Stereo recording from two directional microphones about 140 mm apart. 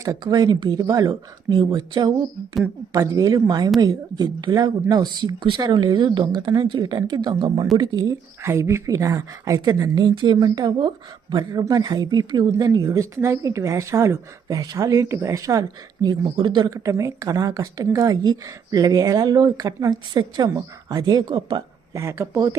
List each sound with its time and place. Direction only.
0.0 s a woman's voice: 25° right (ahead or behind)
21.9 s speech: 20° right (ahead or behind)